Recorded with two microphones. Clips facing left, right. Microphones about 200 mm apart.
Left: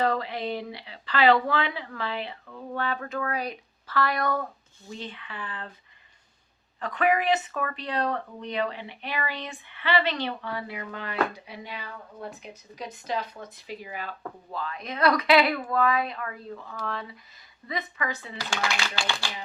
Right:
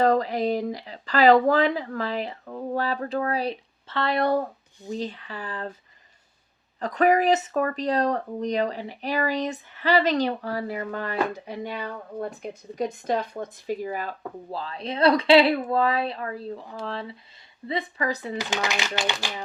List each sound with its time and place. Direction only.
0.0 s speech: 40° right (ahead or behind)
6.7 s speech: 40° right (ahead or behind)
18.5 s speech: 20° right (ahead or behind)